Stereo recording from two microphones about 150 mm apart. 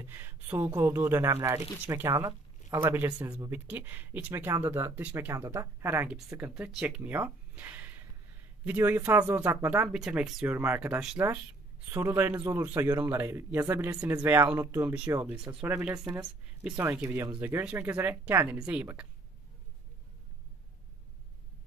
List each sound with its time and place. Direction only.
0.0 s a man's voice: 15° right (ahead or behind)
16.7 s a man's voice: 15° right (ahead or behind)